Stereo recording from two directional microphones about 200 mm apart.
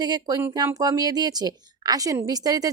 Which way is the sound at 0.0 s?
20° right (ahead or behind).